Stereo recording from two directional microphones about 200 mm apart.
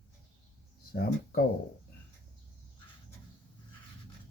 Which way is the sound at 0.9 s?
50° left (ahead or behind).